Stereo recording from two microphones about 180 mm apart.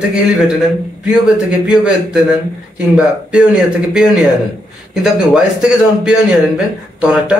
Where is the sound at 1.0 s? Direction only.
5° right (ahead or behind).